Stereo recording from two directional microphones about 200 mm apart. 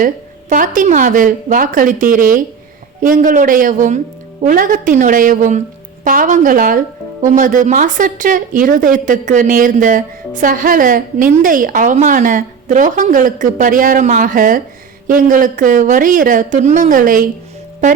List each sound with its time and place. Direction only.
0.0 s a woman's voice: 40° right (ahead or behind)